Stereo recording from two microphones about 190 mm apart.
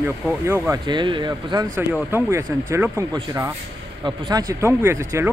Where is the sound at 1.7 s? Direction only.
10° right (ahead or behind).